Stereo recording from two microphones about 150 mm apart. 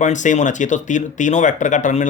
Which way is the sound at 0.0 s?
55° left (ahead or behind).